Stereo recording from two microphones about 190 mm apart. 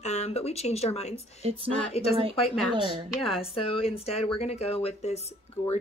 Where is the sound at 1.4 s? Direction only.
35° right (ahead or behind).